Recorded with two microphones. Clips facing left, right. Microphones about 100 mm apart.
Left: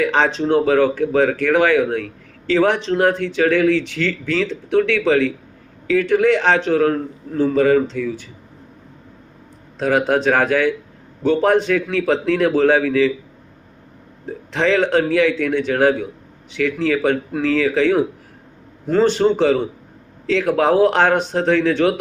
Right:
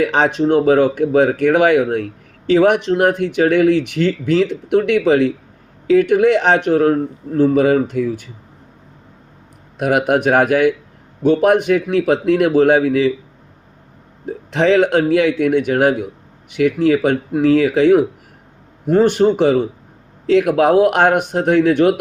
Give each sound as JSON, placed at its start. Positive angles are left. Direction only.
{"t": 0.0, "sound": "speech", "side_deg": -20}
{"t": 7.3, "sound": "speech", "side_deg": -15}
{"t": 9.7, "sound": "speech", "side_deg": -15}
{"t": 14.5, "sound": "speech", "side_deg": -20}
{"t": 19.3, "sound": "speech", "side_deg": -15}